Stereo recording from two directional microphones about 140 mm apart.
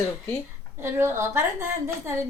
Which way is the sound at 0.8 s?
15° right (ahead or behind).